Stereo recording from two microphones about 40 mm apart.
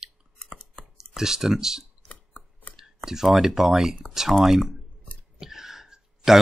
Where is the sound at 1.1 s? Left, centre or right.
Centre.